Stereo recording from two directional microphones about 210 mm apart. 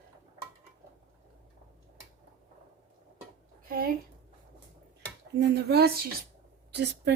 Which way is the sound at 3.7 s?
45° right (ahead or behind).